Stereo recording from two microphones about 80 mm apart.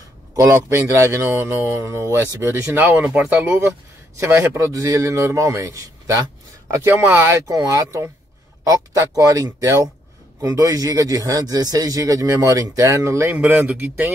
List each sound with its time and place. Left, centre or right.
0.4 s speech: right
3.0 s speech: centre
4.6 s speech: right
6.9 s speech: right
7.4 s a man's voice: right
13.3 s speech: right